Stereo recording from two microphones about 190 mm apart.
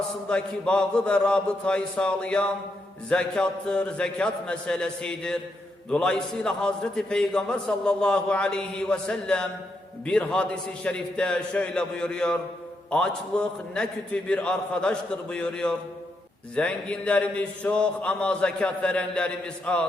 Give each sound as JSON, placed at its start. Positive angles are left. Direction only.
{"t": 0.3, "sound": "a man's voice", "side_deg": 5}